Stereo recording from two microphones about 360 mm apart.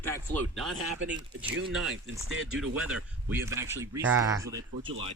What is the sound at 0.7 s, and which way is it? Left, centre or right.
Speech, right.